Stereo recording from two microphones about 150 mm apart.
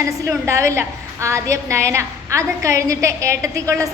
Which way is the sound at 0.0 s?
20° right (ahead or behind).